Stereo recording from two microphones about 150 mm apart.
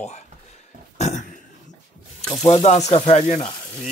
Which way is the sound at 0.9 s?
50° left (ahead or behind).